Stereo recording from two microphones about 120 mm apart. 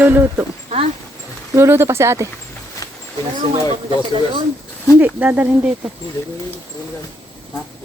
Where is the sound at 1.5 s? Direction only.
20° right (ahead or behind).